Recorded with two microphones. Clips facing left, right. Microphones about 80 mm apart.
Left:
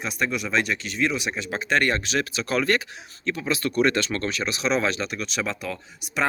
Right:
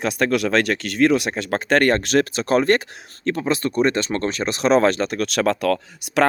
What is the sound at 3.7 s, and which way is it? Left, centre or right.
Speech, right.